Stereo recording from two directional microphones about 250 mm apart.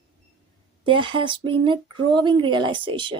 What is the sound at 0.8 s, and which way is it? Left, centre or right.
Speech, centre.